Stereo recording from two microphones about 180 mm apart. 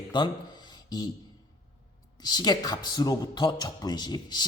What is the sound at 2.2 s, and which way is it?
A man's voice, 25° left (ahead or behind).